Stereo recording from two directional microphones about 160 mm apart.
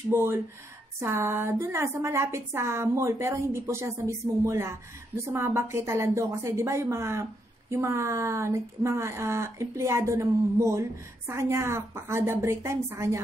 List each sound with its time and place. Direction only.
0.1 s a woman's voice: 15° right (ahead or behind)